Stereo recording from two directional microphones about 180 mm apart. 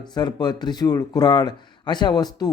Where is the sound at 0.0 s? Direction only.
25° left (ahead or behind).